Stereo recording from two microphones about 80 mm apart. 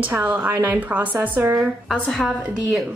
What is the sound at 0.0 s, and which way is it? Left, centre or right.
Speech, right.